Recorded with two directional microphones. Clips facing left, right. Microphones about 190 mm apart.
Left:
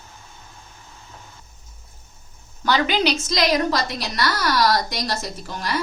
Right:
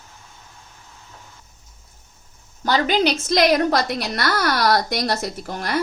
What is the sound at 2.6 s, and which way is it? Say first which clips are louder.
A woman's voice: right 1 dB; 45° right (ahead or behind).